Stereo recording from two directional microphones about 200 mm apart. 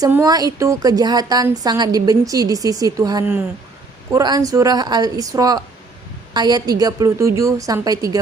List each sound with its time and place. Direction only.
0.0 s a woman's voice: 15° right (ahead or behind)